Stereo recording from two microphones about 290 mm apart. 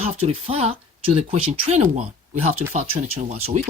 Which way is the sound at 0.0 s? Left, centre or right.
Right.